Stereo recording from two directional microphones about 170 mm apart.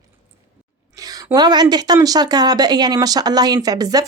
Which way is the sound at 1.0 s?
25° right (ahead or behind).